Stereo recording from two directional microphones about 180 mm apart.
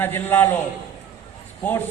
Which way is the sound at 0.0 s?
10° left (ahead or behind).